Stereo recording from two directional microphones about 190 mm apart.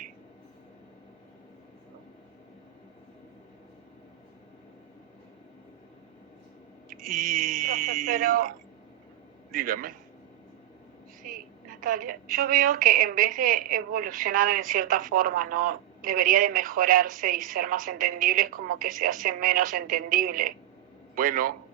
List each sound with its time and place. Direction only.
6.9 s a sound: 45° right (ahead or behind)
9.5 s a woman's voice: 50° right (ahead or behind)
11.2 s a woman's voice: 45° right (ahead or behind)